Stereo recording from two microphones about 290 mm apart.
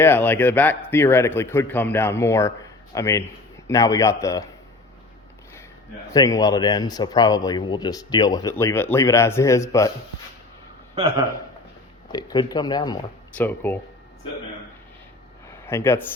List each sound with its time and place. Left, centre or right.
0.0 s speech: centre
6.1 s speech: centre
11.0 s a man's voice: right
12.1 s speech: centre
15.6 s speech: centre